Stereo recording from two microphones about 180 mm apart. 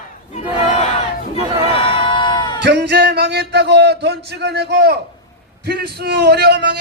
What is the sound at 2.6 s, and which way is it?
A man's voice, 70° right (ahead or behind).